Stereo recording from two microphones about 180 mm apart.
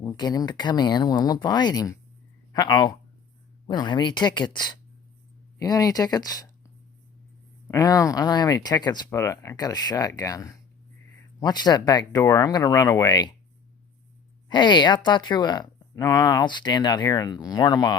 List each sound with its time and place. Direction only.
0.0 s speech: 20° left (ahead or behind)
7.7 s speech: 20° left (ahead or behind)
14.5 s speech: 25° left (ahead or behind)